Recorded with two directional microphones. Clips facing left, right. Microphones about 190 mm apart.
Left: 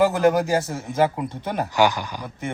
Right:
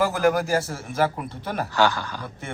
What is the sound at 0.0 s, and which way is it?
Speech, 20° left (ahead or behind).